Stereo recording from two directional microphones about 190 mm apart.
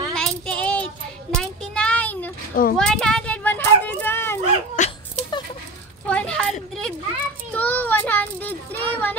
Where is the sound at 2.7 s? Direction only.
5° left (ahead or behind).